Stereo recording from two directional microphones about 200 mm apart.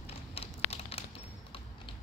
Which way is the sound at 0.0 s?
30° left (ahead or behind).